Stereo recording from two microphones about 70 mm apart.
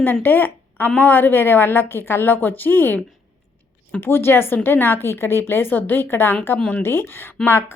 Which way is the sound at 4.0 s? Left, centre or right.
Left.